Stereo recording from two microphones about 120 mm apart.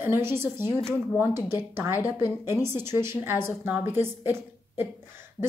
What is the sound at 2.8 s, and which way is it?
A woman's voice, 20° right (ahead or behind).